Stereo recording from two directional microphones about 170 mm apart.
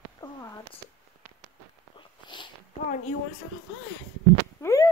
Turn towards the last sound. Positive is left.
turn(degrees=20)  # may be behind; listen again after turning